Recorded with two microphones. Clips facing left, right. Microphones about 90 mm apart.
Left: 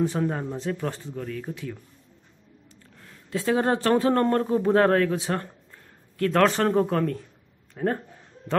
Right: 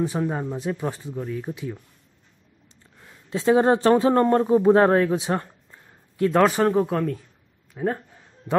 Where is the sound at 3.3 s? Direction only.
20° right (ahead or behind).